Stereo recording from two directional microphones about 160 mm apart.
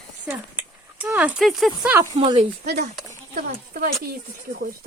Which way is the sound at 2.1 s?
40° right (ahead or behind).